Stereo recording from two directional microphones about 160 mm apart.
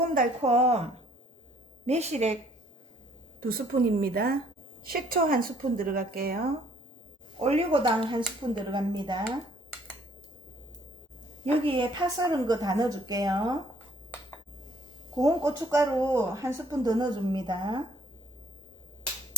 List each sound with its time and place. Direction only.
0.4 s a woman's voice: 40° right (ahead or behind)
1.9 s speech: 45° right (ahead or behind)
3.4 s a woman's voice: 70° right (ahead or behind)
7.4 s a woman's voice: 40° right (ahead or behind)
11.6 s a woman's voice: 30° right (ahead or behind)
15.1 s speech: 20° right (ahead or behind)